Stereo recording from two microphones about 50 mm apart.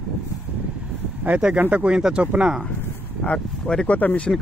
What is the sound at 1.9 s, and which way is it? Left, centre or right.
Speech, centre.